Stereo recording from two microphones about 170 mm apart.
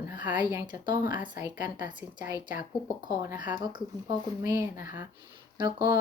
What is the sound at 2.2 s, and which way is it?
Speech, 25° right (ahead or behind).